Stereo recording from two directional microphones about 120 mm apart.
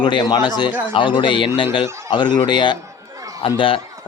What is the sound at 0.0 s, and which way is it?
A man's voice, 40° left (ahead or behind).